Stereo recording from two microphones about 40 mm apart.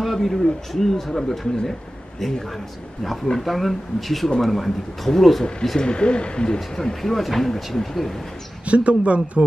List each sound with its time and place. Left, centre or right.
0.0 s speech: centre
5.8 s speech: left
7.0 s speech: centre
8.6 s speech: right